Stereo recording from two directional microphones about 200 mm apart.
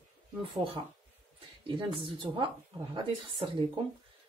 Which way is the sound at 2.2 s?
25° right (ahead or behind).